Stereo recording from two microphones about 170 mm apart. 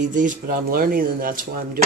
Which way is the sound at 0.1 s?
50° right (ahead or behind).